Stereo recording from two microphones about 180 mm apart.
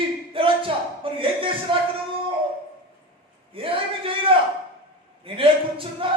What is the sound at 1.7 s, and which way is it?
Speech, 30° right (ahead or behind).